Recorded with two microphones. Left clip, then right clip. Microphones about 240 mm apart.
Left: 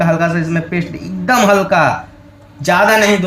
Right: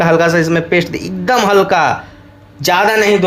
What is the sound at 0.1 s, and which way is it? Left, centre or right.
A man's voice, right.